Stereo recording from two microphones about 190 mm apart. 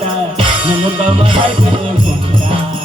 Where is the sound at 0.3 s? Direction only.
30° right (ahead or behind).